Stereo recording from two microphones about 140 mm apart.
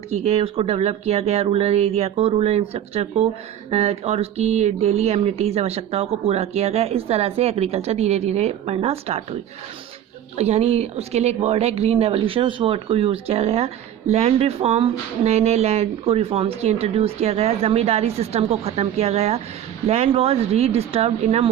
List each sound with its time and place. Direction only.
0.1 s speech: 50° right (ahead or behind)
10.3 s speech: 50° right (ahead or behind)